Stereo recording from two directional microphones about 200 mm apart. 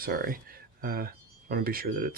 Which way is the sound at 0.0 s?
45° right (ahead or behind).